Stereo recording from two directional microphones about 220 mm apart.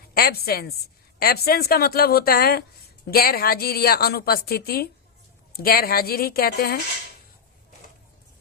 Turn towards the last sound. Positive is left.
turn(degrees=45)  # may be behind; listen again after turning